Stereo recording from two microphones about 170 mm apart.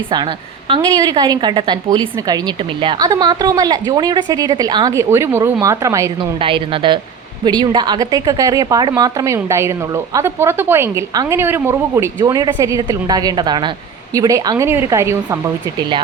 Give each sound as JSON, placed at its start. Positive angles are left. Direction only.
{"t": 0.7, "sound": "a woman's voice", "side_deg": -20}
{"t": 6.4, "sound": "a woman's voice", "side_deg": -30}